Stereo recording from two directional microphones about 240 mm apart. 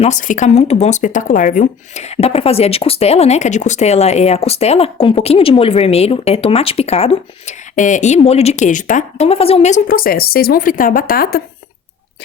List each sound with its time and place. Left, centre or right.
0.0 s speech: left